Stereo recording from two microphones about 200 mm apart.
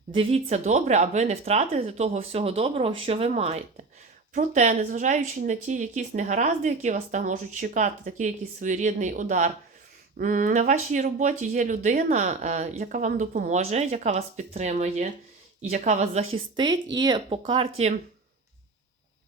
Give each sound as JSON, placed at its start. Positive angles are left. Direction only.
{"t": 0.1, "sound": "speech", "side_deg": -30}